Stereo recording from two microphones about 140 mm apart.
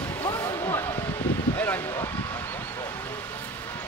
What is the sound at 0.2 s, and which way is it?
Basketball bounce, 25° left (ahead or behind).